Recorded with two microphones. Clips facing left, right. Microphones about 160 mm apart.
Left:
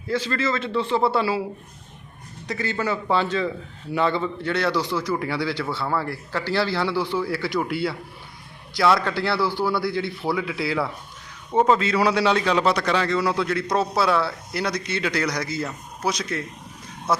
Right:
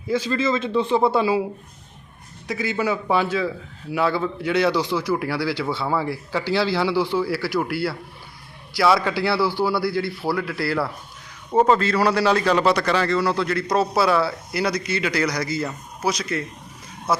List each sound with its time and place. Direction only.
0.1 s a man's voice: 15° right (ahead or behind)
2.5 s a man's voice: 10° right (ahead or behind)